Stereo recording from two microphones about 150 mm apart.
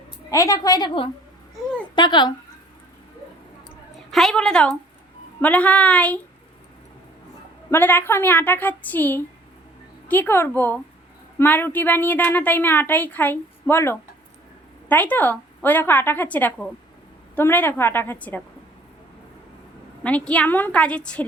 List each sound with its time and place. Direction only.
0.3 s a woman's voice: 20° left (ahead or behind)
4.1 s a woman's voice: centre (ahead or behind)
7.7 s a woman's voice: 15° left (ahead or behind)
20.1 s a woman's voice: 10° left (ahead or behind)